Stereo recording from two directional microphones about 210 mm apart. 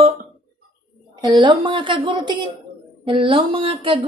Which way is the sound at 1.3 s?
25° right (ahead or behind).